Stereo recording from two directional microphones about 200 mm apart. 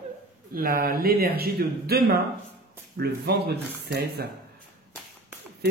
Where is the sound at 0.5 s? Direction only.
45° right (ahead or behind).